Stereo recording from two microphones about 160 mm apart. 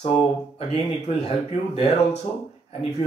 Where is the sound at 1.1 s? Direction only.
40° left (ahead or behind).